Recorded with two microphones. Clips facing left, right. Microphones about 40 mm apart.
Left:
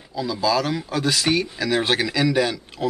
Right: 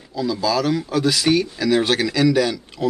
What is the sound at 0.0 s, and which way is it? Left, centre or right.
Speech, centre.